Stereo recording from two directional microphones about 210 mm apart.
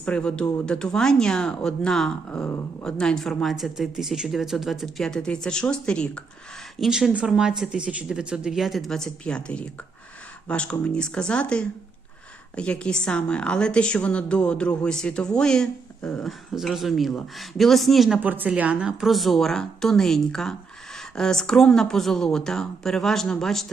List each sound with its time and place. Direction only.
0.0 s a woman's voice: 5° left (ahead or behind)